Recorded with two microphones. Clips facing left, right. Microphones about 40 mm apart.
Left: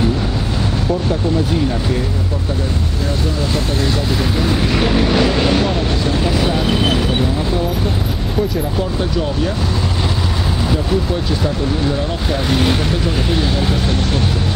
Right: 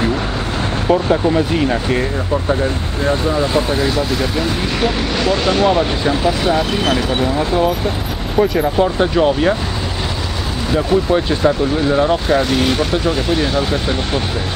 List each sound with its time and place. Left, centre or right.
1.3 s speech: right
4.4 s speech: centre
6.2 s speech: centre
8.4 s speech: right